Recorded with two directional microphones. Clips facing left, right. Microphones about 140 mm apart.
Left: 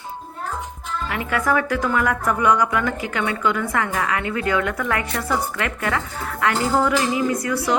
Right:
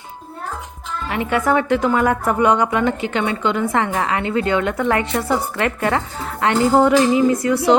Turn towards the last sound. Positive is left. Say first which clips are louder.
# right 6 dB
turn(degrees=-25)  # may be behind; listen again after turning